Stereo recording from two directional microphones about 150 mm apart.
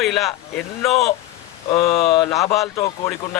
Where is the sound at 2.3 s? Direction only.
20° left (ahead or behind).